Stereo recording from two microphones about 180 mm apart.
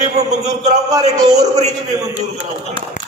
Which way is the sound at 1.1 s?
20° right (ahead or behind).